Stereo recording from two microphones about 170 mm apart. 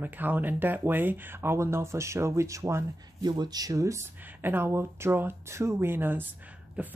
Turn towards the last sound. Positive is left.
turn(degrees=-10)  # may be behind; listen again after turning